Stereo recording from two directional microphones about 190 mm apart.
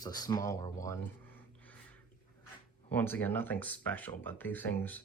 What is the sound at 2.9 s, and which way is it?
Speech, 10° left (ahead or behind).